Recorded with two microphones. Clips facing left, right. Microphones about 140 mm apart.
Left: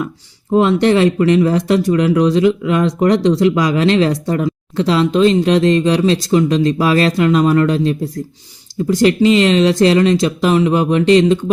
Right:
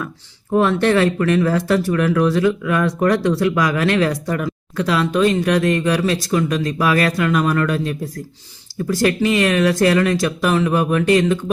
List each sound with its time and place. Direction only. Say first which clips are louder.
0.5 s speech: left 3 dB; 20° left (ahead or behind)